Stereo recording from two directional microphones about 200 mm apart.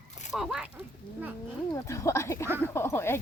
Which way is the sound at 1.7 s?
15° left (ahead or behind).